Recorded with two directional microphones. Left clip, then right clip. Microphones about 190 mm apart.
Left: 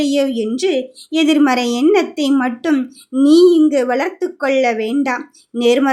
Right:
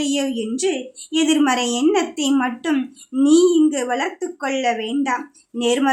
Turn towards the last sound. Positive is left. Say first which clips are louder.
# left 6 dB
turn(degrees=20)  # may be behind; listen again after turning